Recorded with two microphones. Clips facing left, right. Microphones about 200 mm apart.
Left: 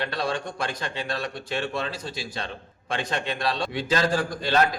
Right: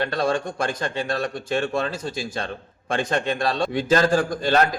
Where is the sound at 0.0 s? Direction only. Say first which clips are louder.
Right 5 dB; 45° right (ahead or behind).